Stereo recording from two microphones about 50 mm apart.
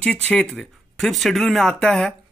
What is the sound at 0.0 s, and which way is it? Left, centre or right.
Speech, left.